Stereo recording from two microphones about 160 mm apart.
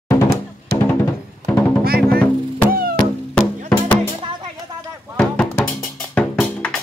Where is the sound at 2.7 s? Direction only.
70° right (ahead or behind).